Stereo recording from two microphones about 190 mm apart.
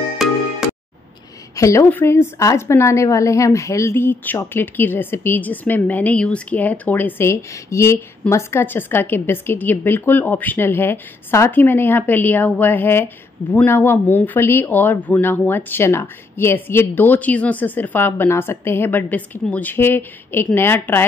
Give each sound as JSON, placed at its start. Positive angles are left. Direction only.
{"t": 0.2, "sound": "music", "side_deg": 0}
{"t": 1.5, "sound": "a woman's voice", "side_deg": 15}